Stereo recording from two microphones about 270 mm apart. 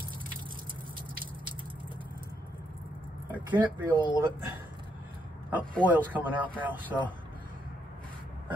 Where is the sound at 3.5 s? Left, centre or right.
Centre.